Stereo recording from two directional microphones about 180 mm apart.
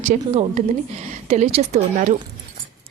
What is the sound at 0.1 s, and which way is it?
A woman's voice, 40° right (ahead or behind).